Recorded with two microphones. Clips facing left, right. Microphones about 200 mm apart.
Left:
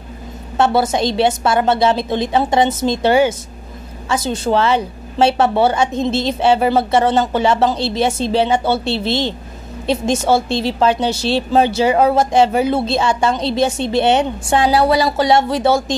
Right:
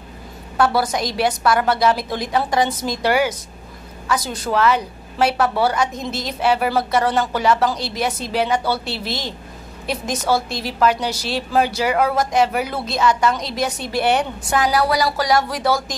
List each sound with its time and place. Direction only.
0.6 s a woman's voice: 25° left (ahead or behind)